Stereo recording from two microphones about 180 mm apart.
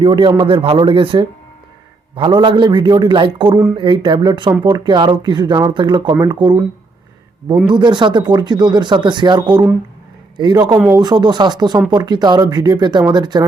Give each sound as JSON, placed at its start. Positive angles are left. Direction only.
{"t": 0.0, "sound": "a man's voice", "side_deg": -30}
{"t": 7.7, "sound": "a man's voice", "side_deg": -25}